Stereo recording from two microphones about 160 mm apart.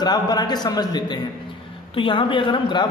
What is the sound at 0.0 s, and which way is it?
A man's voice, 25° left (ahead or behind).